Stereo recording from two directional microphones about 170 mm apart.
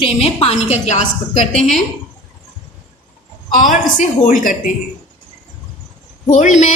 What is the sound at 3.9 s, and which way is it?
Speech, 50° left (ahead or behind).